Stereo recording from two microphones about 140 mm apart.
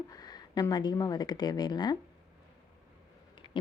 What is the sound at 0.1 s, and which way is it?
Speech, 30° left (ahead or behind).